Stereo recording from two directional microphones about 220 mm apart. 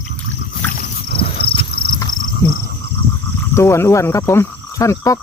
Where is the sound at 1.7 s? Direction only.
45° left (ahead or behind).